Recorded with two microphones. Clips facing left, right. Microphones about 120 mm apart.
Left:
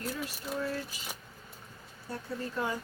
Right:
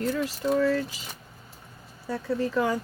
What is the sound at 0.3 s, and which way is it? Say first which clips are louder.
Speech: right 11 dB; 90° right.